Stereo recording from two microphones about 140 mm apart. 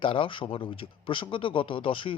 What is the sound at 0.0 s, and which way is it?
A man's voice, 40° left (ahead or behind).